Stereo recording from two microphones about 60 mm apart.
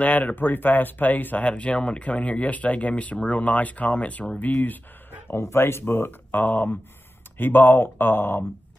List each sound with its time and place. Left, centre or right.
0.0 s speech: left
5.3 s speech: left